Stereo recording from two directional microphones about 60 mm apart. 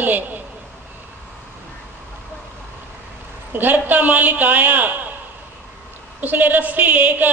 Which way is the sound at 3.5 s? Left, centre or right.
Right.